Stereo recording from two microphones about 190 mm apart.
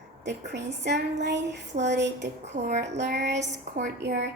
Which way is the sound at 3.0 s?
65° right (ahead or behind).